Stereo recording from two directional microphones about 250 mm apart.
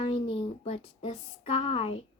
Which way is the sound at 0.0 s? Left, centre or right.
Left.